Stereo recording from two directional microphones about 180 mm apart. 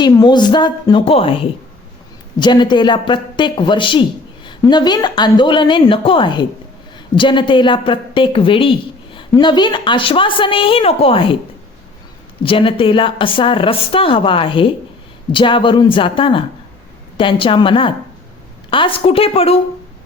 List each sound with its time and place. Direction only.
0.0 s a woman's voice: 20° left (ahead or behind)
12.4 s a woman's voice: 30° left (ahead or behind)